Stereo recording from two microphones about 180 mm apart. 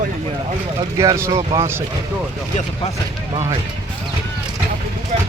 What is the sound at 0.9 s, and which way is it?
Speech, 15° right (ahead or behind).